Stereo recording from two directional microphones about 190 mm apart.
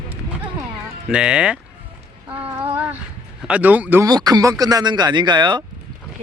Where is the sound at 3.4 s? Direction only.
5° right (ahead or behind); by 5.6 s 25° right (ahead or behind).